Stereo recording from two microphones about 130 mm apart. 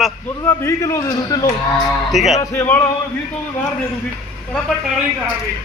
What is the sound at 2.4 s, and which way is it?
Speech, 15° left (ahead or behind).